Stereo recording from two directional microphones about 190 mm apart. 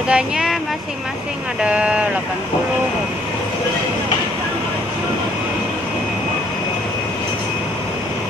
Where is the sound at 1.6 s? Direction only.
5° right (ahead or behind).